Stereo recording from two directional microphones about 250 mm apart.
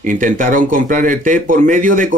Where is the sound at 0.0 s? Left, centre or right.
Right.